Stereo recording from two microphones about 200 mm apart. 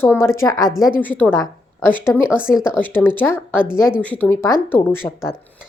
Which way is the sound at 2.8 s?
10° left (ahead or behind).